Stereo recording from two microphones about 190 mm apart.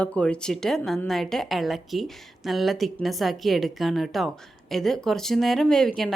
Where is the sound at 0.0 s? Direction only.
5° left (ahead or behind).